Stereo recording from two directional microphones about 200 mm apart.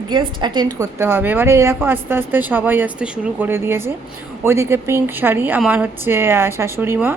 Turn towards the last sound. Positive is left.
turn(degrees=-10)  # may be behind; listen again after turning